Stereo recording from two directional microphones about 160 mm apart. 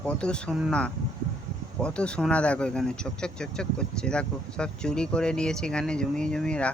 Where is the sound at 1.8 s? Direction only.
5° left (ahead or behind).